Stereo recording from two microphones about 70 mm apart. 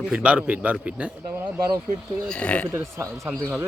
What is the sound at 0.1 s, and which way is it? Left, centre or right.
A man's voice, centre.